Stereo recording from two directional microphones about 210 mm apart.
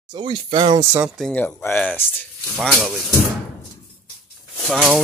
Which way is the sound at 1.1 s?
5° left (ahead or behind).